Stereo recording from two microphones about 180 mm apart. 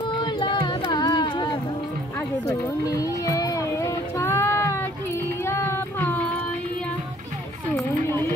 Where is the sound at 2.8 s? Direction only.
20° left (ahead or behind).